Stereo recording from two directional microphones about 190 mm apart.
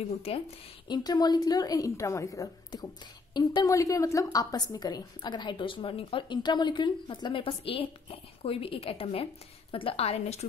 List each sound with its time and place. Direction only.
0.8 s a woman's voice: 20° left (ahead or behind)